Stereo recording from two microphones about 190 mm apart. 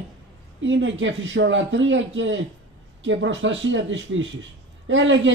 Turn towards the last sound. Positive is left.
turn(degrees=-80)